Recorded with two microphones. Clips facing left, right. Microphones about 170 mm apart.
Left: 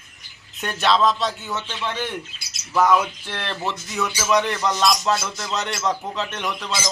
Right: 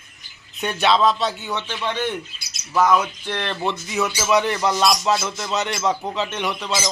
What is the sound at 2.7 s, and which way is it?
Speech, centre (ahead or behind).